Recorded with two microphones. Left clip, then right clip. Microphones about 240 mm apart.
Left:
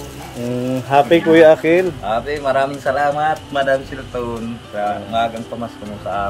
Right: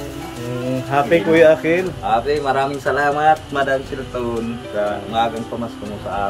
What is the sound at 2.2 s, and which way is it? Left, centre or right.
Speech, centre.